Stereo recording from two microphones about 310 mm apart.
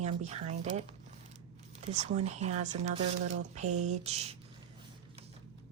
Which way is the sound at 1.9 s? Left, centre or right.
Right.